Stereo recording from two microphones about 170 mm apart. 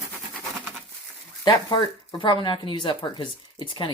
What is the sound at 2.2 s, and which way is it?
Speech, 25° left (ahead or behind).